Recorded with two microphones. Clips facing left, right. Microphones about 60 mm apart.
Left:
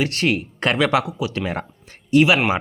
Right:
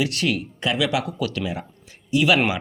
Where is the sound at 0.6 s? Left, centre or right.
Left.